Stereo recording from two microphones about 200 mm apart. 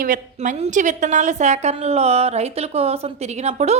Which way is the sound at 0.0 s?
40° right (ahead or behind).